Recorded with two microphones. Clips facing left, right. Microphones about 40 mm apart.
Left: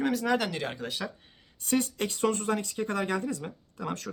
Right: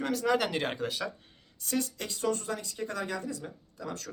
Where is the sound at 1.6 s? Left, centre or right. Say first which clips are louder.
Left 5 dB; left.